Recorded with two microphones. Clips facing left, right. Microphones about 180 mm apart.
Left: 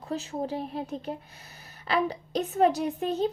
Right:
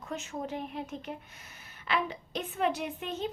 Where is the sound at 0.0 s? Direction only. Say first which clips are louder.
Left 5 dB; 35° left (ahead or behind).